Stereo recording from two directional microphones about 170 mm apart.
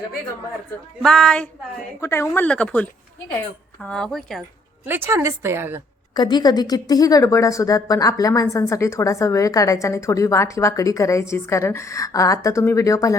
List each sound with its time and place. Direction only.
1.0 s speech: 5° left (ahead or behind)
2.0 s speech: 15° left (ahead or behind)
4.9 s speech: 15° right (ahead or behind)
6.1 s a woman's voice: 25° left (ahead or behind)